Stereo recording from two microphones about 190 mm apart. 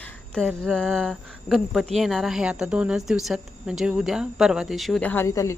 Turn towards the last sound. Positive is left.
turn(degrees=15)  # may be behind; listen again after turning